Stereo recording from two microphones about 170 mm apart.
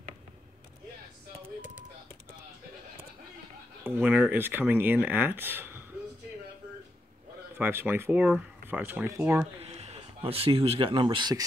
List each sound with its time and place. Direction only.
3.8 s speech: 10° right (ahead or behind)
7.5 s speech: 10° right (ahead or behind)
9.6 s speech: 40° right (ahead or behind)